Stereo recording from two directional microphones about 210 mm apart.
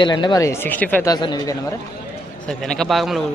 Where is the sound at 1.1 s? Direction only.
20° left (ahead or behind).